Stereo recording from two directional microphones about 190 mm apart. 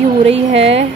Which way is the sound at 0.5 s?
70° right (ahead or behind).